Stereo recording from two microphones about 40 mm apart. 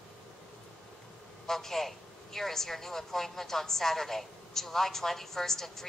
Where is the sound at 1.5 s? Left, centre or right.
Centre.